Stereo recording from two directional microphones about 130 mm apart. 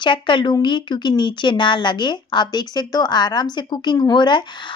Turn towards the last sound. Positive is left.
turn(degrees=35)  # may be behind; listen again after turning